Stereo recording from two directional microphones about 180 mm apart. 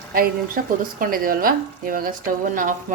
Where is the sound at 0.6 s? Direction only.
55° right (ahead or behind).